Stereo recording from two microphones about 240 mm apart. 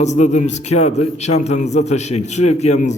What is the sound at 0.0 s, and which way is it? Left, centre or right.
A man's voice, left.